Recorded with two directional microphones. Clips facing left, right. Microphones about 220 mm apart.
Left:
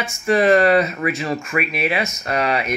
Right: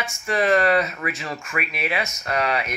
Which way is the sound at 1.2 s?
35° left (ahead or behind).